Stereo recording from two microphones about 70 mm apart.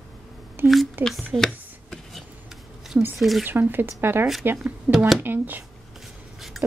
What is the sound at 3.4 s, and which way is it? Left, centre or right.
Speech, right.